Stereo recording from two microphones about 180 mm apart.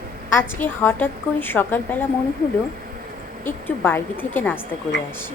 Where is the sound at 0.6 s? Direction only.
10° left (ahead or behind).